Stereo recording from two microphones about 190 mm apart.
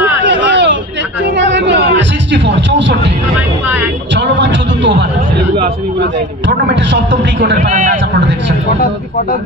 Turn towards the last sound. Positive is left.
turn(degrees=-40)  # may be behind; listen again after turning